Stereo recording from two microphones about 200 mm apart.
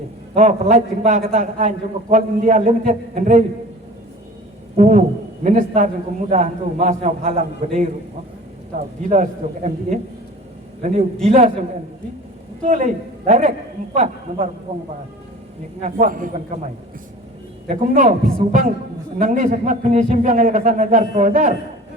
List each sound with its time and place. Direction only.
0.3 s a man's voice: 35° right (ahead or behind)
4.8 s a man's voice: 35° right (ahead or behind)
9.0 s a man's voice: 40° right (ahead or behind)
12.6 s a man's voice: 40° right (ahead or behind)
15.8 s a man's voice: 40° right (ahead or behind)
17.7 s a man's voice: 40° right (ahead or behind)
19.2 s a man's voice: 40° right (ahead or behind)